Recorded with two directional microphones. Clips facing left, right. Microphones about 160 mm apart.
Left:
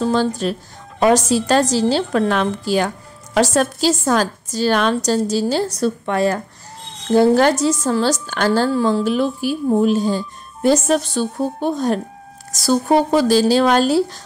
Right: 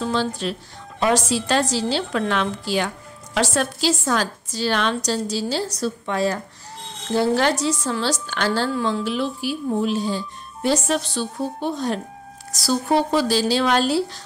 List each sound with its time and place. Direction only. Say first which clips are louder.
0.0 s a woman's voice: left 5 dB; 45° left (ahead or behind)